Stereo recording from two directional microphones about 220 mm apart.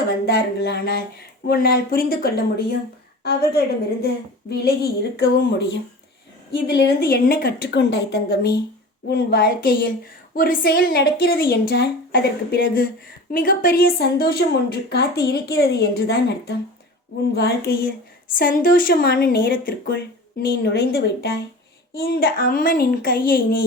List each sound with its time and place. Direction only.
0.3 s a woman's voice: 45° left (ahead or behind)
4.0 s a woman's voice: 45° left (ahead or behind)
6.7 s a woman's voice: 50° left (ahead or behind)